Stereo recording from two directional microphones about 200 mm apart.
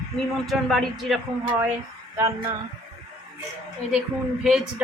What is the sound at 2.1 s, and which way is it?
Speech, 15° right (ahead or behind).